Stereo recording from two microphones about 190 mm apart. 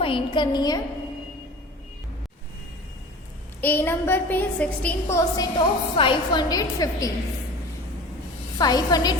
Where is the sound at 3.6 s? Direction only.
10° left (ahead or behind).